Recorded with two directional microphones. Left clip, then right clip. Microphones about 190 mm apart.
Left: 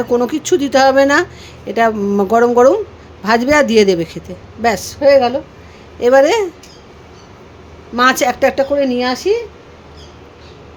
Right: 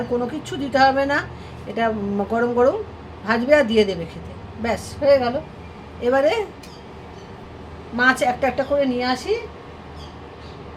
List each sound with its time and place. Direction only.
0.1 s a woman's voice: 65° left (ahead or behind)
7.9 s a woman's voice: 65° left (ahead or behind)